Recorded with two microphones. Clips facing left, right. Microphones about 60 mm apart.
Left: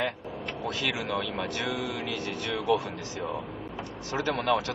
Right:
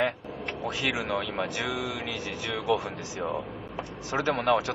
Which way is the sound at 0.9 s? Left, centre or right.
Centre.